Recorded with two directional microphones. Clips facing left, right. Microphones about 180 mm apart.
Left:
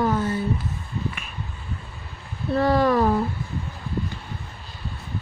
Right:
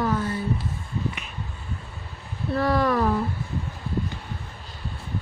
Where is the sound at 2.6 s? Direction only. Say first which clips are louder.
Left 3 dB; 25° left (ahead or behind).